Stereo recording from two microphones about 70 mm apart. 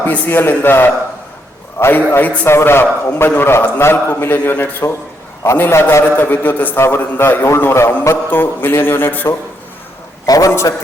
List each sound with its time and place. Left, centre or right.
0.0 s a man's voice: left
5.7 s a man's voice: left
10.2 s a man's voice: left
10.5 s a man's voice: left